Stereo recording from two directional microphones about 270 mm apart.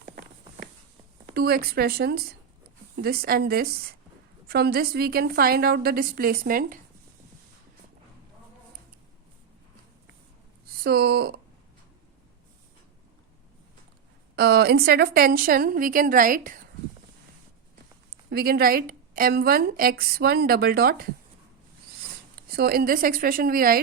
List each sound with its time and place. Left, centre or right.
0.0 s clip-clop: right
1.3 s a woman's voice: right
10.8 s a woman's voice: right
14.3 s a woman's voice: right
18.3 s a woman's voice: right
22.4 s a woman's voice: right